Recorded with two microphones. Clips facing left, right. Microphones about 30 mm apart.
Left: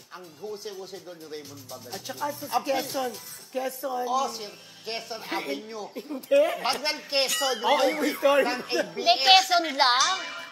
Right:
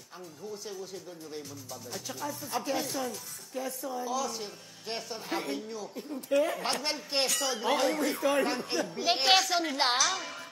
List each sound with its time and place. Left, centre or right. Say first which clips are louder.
0.5 s speech: left 3 dB; left
7.2 s a woman's voice: left 6 dB; centre